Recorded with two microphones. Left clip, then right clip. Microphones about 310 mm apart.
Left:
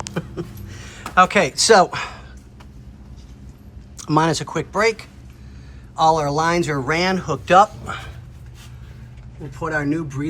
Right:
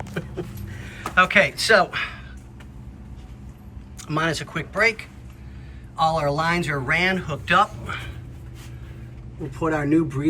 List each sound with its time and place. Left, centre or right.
0.7 s a sound: centre
3.9 s speech: centre
9.6 s speech: centre